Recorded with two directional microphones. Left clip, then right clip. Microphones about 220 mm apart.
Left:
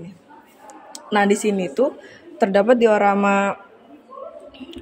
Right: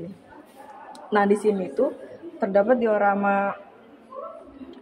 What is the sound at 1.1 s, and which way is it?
A woman's voice, 40° left (ahead or behind).